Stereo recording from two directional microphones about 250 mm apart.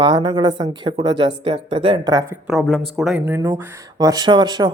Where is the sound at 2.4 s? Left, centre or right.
Centre.